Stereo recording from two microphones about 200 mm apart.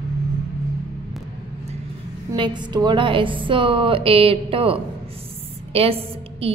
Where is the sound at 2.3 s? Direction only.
25° right (ahead or behind).